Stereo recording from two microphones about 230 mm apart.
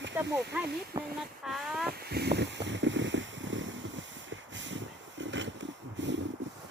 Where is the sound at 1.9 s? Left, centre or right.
Right.